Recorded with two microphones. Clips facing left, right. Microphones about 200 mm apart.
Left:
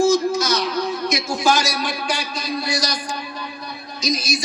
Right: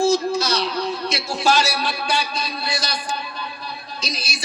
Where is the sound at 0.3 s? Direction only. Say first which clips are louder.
Left 1 dB; 30° right (ahead or behind).